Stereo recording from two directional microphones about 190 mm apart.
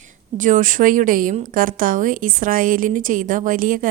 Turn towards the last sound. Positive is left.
turn(degrees=-45)  # may be behind; listen again after turning